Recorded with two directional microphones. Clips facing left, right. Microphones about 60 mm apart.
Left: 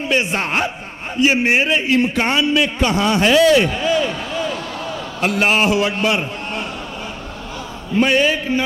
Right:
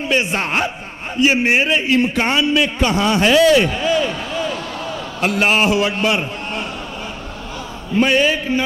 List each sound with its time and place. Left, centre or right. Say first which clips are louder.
0.1 s a man's voice: even; right
7.9 s a man's voice: even; right